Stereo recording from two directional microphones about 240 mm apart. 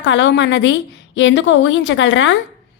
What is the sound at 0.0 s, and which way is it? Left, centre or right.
A woman's voice, left.